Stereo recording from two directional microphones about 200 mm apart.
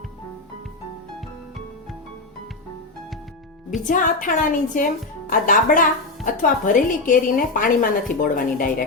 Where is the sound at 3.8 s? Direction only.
40° left (ahead or behind).